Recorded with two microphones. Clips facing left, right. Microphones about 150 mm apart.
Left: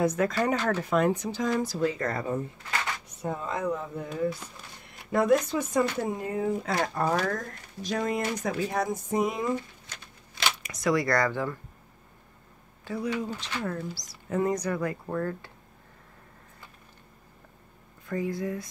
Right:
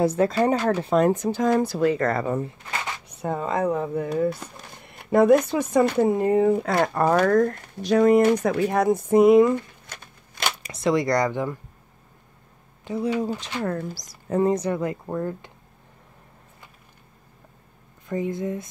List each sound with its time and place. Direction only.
0.0 s speech: 30° right (ahead or behind); by 2.4 s 75° right (ahead or behind)
3.2 s speech: 65° right (ahead or behind)
10.6 s speech: 25° right (ahead or behind)
12.8 s speech: 20° right (ahead or behind)
13.6 s speech: 55° right (ahead or behind)
14.4 s speech: 25° right (ahead or behind)
18.0 s speech: 20° right (ahead or behind)